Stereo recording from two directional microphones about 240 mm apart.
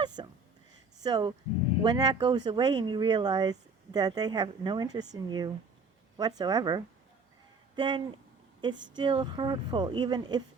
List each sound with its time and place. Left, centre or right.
0.2 s speech: centre